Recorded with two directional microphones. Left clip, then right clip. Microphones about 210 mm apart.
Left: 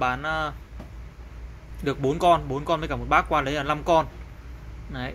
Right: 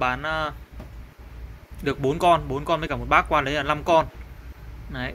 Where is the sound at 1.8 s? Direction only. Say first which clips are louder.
Right 1 dB; centre (ahead or behind).